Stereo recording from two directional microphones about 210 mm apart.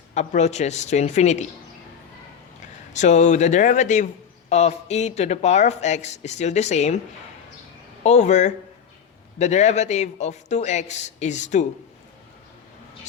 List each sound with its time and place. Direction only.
0.1 s a man's voice: 30° left (ahead or behind)
2.9 s a man's voice: 35° left (ahead or behind)
8.0 s a man's voice: 35° left (ahead or behind)